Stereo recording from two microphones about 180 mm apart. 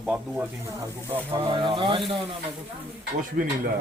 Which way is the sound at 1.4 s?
25° right (ahead or behind).